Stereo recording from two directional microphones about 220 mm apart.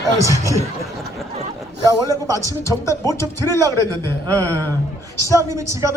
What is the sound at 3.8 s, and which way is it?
A man's voice, 15° right (ahead or behind).